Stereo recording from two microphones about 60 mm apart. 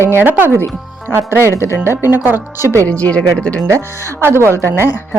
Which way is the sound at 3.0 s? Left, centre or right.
Centre.